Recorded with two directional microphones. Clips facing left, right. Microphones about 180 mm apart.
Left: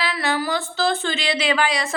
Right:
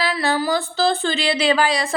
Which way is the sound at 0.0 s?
35° right (ahead or behind).